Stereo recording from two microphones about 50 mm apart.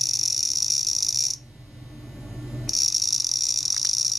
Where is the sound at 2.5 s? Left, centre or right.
Centre.